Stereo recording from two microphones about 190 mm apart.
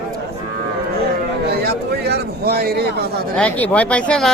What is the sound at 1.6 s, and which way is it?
A man's voice, 55° right (ahead or behind).